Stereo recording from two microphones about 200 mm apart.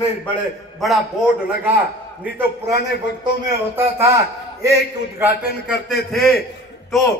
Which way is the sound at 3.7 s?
10° right (ahead or behind).